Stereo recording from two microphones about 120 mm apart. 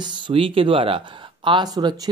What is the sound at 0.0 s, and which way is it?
Speech, 50° right (ahead or behind).